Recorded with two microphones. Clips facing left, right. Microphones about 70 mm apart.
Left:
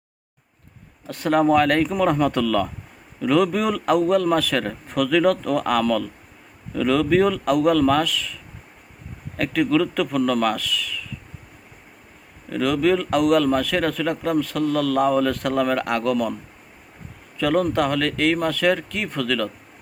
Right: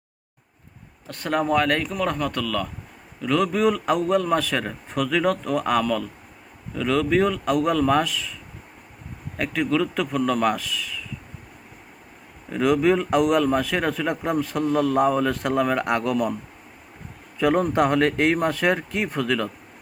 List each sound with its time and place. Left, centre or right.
1.0 s speech: centre
9.4 s a man's voice: centre
12.5 s a man's voice: centre
17.3 s speech: centre